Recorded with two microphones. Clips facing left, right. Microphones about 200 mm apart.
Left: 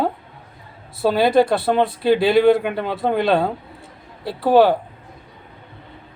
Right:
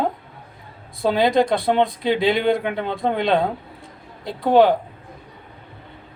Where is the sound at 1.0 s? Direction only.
5° left (ahead or behind).